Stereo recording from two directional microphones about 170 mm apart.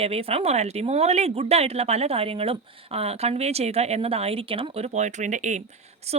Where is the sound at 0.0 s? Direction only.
35° right (ahead or behind).